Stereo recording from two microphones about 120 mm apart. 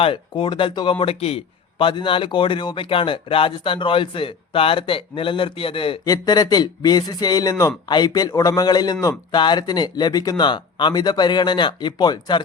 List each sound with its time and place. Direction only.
0.0 s a man's voice: 45° left (ahead or behind)
6.1 s speech: 35° left (ahead or behind)
7.5 s speech: 20° left (ahead or behind)
7.9 s speech: 35° left (ahead or behind)